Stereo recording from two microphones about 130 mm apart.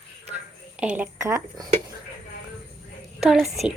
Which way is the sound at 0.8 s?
10° right (ahead or behind).